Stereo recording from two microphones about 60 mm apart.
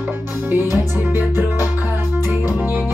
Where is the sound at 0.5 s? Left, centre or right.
Right.